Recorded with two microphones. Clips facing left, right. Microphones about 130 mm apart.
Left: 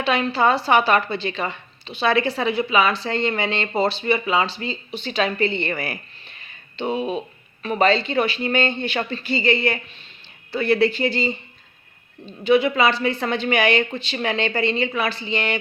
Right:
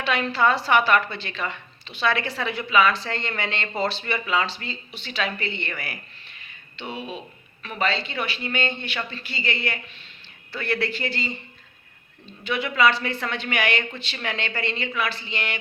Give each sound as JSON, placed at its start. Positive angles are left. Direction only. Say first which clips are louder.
{"t": 0.0, "sound": "speech", "louder": "left 3 dB", "side_deg": 20}
{"t": 5.0, "sound": "speech", "louder": "left 7 dB", "side_deg": 40}
{"t": 9.3, "sound": "speech", "louder": "left 9 dB", "side_deg": 30}
{"t": 12.5, "sound": "speech", "louder": "left 5 dB", "side_deg": 30}